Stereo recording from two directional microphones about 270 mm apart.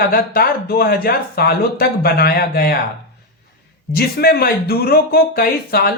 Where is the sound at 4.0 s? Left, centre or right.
Left.